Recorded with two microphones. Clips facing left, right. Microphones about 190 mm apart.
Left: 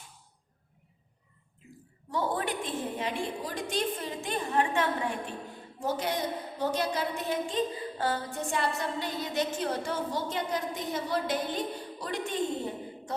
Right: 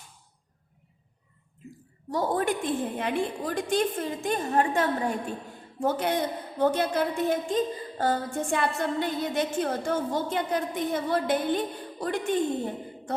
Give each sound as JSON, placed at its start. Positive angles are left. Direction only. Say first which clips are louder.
{"t": 2.0, "sound": "a woman's voice", "louder": "right 5 dB", "side_deg": -40}
{"t": 5.8, "sound": "a woman's voice", "louder": "right 5 dB", "side_deg": -55}